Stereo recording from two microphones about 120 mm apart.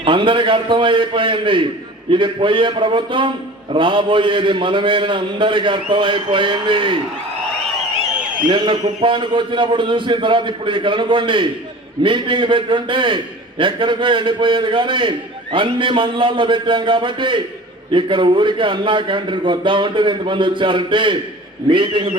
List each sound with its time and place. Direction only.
0.0 s a man's voice: 45° right (ahead or behind)
8.4 s a man's voice: 45° right (ahead or behind)